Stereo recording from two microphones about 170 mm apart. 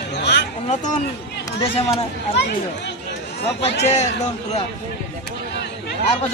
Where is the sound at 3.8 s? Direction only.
40° left (ahead or behind).